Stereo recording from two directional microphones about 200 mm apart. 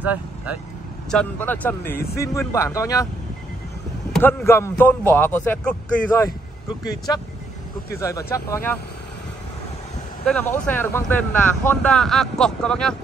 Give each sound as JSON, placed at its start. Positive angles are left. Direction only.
{"t": 0.0, "sound": "speech", "side_deg": -10}
{"t": 1.1, "sound": "a man's voice", "side_deg": 10}
{"t": 4.1, "sound": "a man's voice", "side_deg": 10}
{"t": 10.2, "sound": "speech", "side_deg": 5}